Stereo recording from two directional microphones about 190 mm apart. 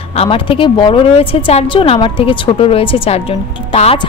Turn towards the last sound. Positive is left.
turn(degrees=30)  # may be behind; listen again after turning